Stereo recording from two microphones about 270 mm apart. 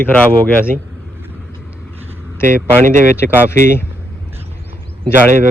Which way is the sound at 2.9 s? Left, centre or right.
Right.